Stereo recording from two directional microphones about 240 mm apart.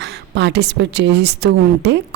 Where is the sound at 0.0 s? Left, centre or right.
Right.